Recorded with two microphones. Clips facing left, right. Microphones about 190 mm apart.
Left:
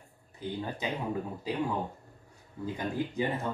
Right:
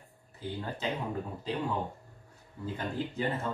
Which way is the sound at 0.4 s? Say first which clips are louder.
Left 1 dB; 15° left (ahead or behind).